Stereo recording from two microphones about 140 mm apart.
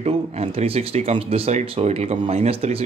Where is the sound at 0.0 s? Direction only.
45° right (ahead or behind).